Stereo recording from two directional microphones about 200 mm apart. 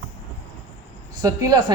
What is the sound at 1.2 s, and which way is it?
Speech, 20° right (ahead or behind).